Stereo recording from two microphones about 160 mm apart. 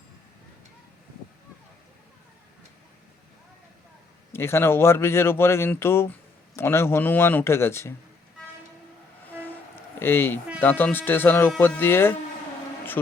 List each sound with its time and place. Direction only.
4.3 s speech: 15° left (ahead or behind)
9.4 s train: 15° left (ahead or behind)
10.6 s speech: 10° left (ahead or behind)